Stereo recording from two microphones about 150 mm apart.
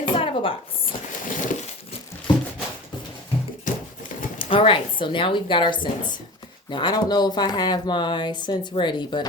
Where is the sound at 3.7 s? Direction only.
60° left (ahead or behind).